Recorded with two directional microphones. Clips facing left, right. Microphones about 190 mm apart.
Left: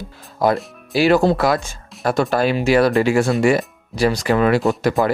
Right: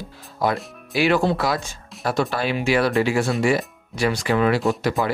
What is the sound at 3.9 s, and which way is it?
Speech, 35° left (ahead or behind).